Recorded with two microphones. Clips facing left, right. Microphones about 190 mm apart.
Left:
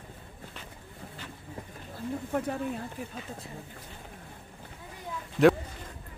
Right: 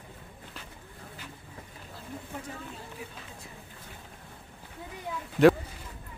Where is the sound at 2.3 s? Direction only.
60° left (ahead or behind).